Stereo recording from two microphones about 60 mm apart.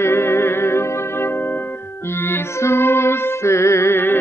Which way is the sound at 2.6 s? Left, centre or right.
Left.